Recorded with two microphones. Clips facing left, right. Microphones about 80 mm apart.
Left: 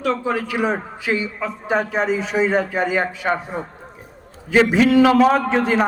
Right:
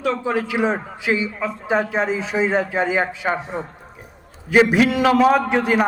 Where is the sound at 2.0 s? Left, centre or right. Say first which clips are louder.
Left 2 dB; left.